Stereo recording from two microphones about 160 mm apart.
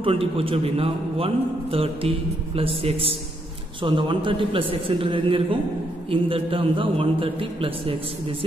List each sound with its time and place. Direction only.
0.0 s a man's voice: 35° right (ahead or behind)